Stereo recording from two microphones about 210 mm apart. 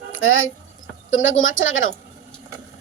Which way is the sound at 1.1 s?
70° left (ahead or behind).